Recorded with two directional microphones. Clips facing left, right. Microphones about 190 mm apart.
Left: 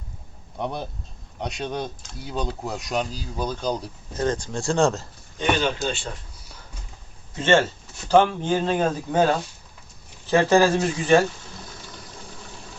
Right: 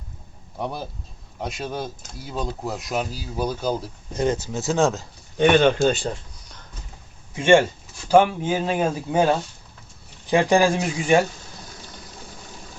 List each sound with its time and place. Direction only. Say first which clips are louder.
0.6 s speech: even; 5° right (ahead or behind)
5.4 s a man's voice: right 7 dB; 55° right (ahead or behind)
5.9 s speech: right 6 dB; 35° right (ahead or behind)
6.4 s a sound: even; 5° left (ahead or behind)
7.3 s speech: right 3 dB; 15° right (ahead or behind)